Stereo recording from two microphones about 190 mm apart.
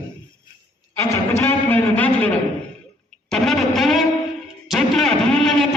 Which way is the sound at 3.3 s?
Centre (ahead or behind).